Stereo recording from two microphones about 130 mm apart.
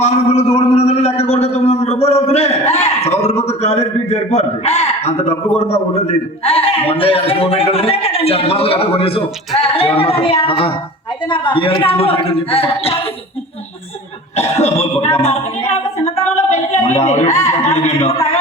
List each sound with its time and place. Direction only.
0.0 s a man's voice: 55° left (ahead or behind)
14.5 s a man's voice: 55° left (ahead or behind)
15.2 s a sound: 55° left (ahead or behind)
17.2 s a man's voice: 25° left (ahead or behind)
17.5 s a man's voice: 55° left (ahead or behind)